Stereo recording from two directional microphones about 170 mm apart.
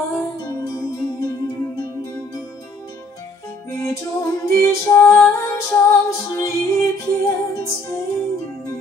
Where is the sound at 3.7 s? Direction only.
15° left (ahead or behind).